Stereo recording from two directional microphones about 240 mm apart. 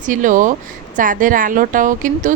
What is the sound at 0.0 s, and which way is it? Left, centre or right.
A woman's voice, right.